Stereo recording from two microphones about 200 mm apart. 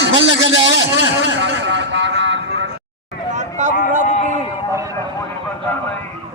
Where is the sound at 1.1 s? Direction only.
65° right (ahead or behind).